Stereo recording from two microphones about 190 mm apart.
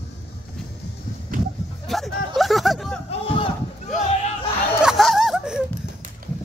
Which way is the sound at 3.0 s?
30° left (ahead or behind).